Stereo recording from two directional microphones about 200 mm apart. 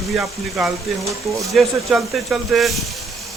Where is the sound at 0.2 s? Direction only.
Centre (ahead or behind).